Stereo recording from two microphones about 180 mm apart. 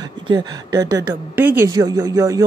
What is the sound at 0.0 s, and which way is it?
A woman's voice, 20° right (ahead or behind).